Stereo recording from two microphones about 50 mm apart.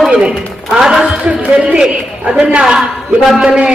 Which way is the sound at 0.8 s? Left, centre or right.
Centre.